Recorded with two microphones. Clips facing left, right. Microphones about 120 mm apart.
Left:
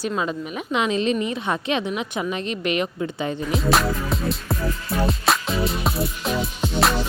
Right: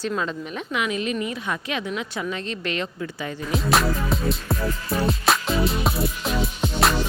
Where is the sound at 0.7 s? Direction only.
30° left (ahead or behind).